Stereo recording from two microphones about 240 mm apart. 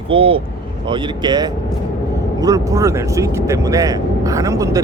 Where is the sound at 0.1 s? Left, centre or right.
Right.